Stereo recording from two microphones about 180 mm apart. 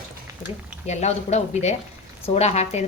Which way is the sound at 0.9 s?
40° left (ahead or behind).